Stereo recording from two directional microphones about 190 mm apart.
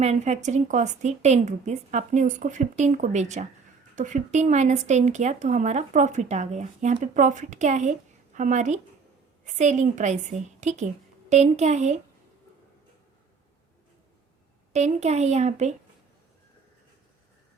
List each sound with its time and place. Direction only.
0.0 s speech: 35° right (ahead or behind)
14.7 s speech: 35° right (ahead or behind)